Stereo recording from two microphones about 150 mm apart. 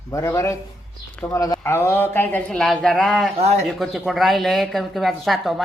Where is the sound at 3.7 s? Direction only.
Centre (ahead or behind).